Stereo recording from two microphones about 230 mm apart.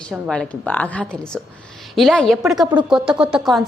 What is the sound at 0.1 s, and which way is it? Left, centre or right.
A woman's voice, centre.